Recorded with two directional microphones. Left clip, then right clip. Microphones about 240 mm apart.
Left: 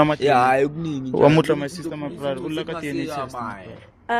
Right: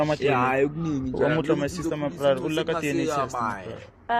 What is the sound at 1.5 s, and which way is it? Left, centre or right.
Speech, left.